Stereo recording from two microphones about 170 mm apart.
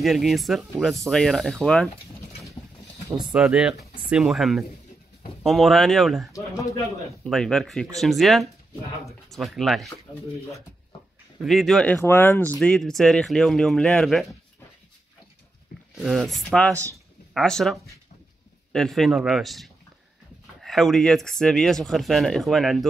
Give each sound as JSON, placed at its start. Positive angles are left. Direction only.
{"t": 0.0, "sound": "speech", "side_deg": 0}
{"t": 3.1, "sound": "speech", "side_deg": -25}
{"t": 3.3, "sound": "speech", "side_deg": -5}
{"t": 6.3, "sound": "speech", "side_deg": 20}
{"t": 7.2, "sound": "speech", "side_deg": 5}
{"t": 11.4, "sound": "speech", "side_deg": 0}
{"t": 16.0, "sound": "speech", "side_deg": 0}